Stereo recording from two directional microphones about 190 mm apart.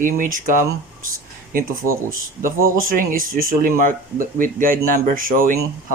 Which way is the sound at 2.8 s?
45° right (ahead or behind).